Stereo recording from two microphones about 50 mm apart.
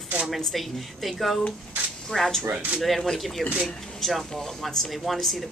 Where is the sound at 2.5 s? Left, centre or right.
Right.